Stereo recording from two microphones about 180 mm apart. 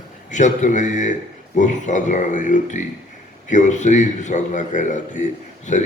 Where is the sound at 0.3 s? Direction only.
45° left (ahead or behind).